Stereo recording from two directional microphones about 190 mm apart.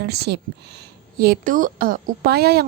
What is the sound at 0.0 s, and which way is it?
Speech, 60° right (ahead or behind).